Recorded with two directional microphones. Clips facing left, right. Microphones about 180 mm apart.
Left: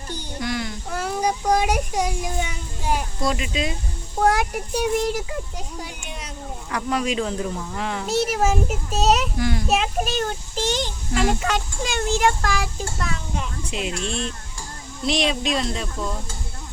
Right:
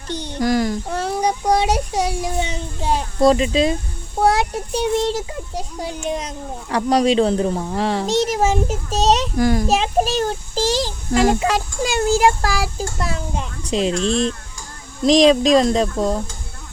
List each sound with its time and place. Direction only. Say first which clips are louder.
0.1 s a child's voice: right 7 dB; 80° right
0.4 s a sound: right 10 dB; 45° right (ahead or behind)
1.6 s a child's voice: right 3 dB; 35° right (ahead or behind)
9.4 s a child's voice: right 7 dB; 45° right (ahead or behind)
9.6 s a child's voice: right 5 dB; 30° right (ahead or behind)